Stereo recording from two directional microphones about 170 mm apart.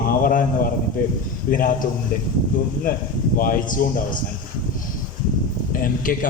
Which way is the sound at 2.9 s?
55° left (ahead or behind).